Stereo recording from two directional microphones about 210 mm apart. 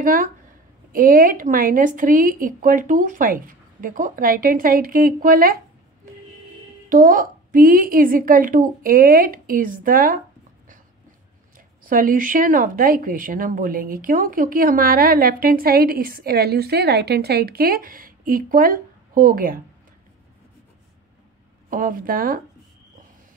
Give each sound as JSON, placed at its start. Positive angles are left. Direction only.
{"t": 0.0, "sound": "a woman's voice", "side_deg": -40}
{"t": 6.9, "sound": "speech", "side_deg": -40}
{"t": 11.8, "sound": "speech", "side_deg": -40}
{"t": 21.6, "sound": "speech", "side_deg": -40}